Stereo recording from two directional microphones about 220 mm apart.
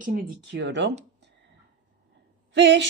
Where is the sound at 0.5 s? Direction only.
55° right (ahead or behind).